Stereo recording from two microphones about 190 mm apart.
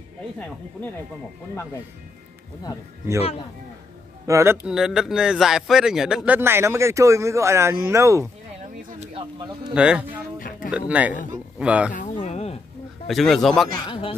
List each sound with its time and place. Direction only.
4.3 s speech: 15° right (ahead or behind)
4.6 s speech: 5° right (ahead or behind)
8.8 s a sound: 35° right (ahead or behind)
9.8 s speech: 5° right (ahead or behind)
11.9 s a sound: 40° left (ahead or behind)
13.0 s speech: centre (ahead or behind)
13.8 s speech: 30° left (ahead or behind)